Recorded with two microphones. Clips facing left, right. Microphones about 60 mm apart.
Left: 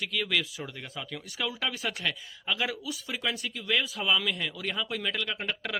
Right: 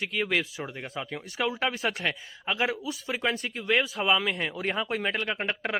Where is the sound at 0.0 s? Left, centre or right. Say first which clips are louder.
Right 2 dB; right.